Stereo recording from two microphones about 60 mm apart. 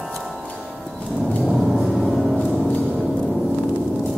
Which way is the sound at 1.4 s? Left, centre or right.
Centre.